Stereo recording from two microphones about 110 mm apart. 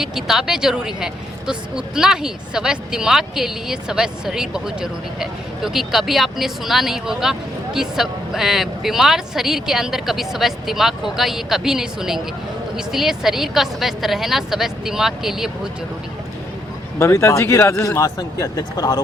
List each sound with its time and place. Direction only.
0.0 s speech: 5° right (ahead or behind)
17.0 s speech: 25° left (ahead or behind)